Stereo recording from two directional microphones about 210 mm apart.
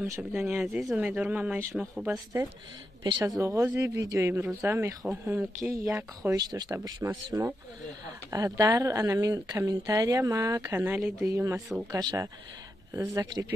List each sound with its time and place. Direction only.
0.2 s speech: centre (ahead or behind)